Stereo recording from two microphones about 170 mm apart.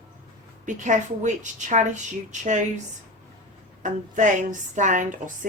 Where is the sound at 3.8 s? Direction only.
50° right (ahead or behind).